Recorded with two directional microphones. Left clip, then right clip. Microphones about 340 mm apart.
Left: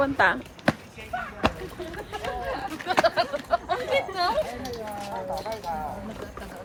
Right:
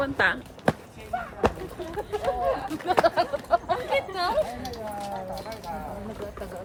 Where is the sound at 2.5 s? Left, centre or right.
Right.